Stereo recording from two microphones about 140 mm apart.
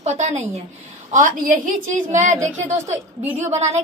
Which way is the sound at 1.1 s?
70° right (ahead or behind).